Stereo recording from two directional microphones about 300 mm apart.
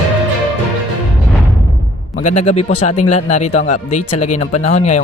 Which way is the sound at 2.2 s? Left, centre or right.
Left.